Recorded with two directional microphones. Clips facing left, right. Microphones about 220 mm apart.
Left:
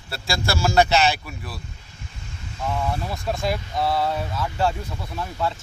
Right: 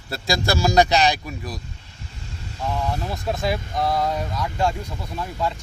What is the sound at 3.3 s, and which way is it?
Speech, centre (ahead or behind).